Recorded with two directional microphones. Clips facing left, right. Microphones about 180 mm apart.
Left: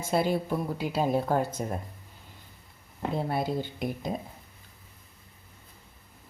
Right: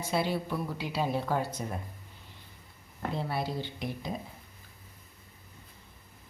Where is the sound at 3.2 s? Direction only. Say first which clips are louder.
Left 5 dB; 50° left (ahead or behind).